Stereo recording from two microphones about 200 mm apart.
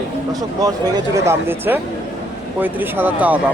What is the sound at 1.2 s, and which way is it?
A man's voice, 15° right (ahead or behind).